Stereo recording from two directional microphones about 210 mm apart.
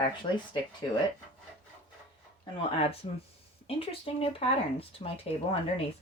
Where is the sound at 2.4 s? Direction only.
25° left (ahead or behind).